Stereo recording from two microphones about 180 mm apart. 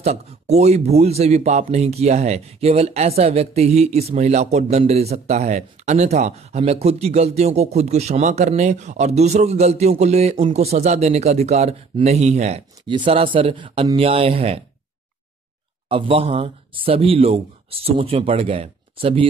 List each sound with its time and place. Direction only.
0.0 s speech: 35° right (ahead or behind)
15.9 s speech: 30° right (ahead or behind)